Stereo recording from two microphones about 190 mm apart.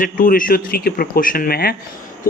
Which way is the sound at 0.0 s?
45° left (ahead or behind).